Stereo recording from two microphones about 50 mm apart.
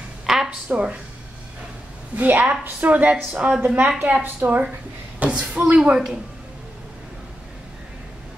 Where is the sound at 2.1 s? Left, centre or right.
Right.